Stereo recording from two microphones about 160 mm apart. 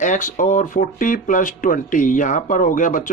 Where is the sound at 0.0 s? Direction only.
55° left (ahead or behind).